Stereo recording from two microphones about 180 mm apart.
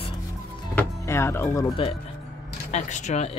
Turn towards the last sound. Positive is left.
turn(degrees=40)  # may be behind; listen again after turning